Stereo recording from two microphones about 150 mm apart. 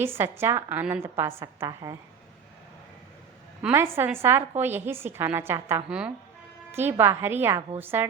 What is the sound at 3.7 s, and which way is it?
A woman's voice, 15° right (ahead or behind).